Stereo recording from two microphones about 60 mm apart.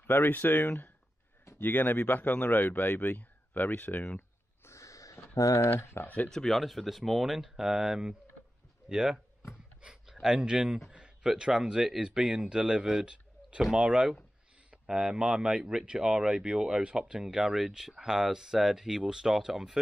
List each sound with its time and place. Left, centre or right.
0.0 s speech: left
4.6 s a sound: left
5.4 s speech: left
5.8 s speech: left
6.2 s speech: centre
10.2 s speech: centre